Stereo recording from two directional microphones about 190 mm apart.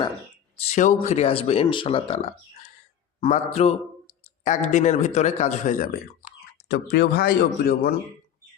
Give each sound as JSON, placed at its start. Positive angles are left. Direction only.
{"t": 0.7, "sound": "speech", "side_deg": 40}
{"t": 6.7, "sound": "speech", "side_deg": 60}